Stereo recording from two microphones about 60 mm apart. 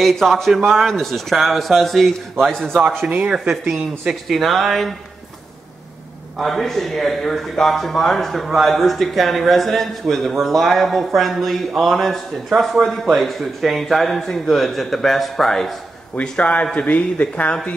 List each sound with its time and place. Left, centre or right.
0.0 s a man's voice: centre
3.0 s speech: right
4.3 s a man's voice: centre
6.3 s a man's voice: centre
16.2 s a man's voice: left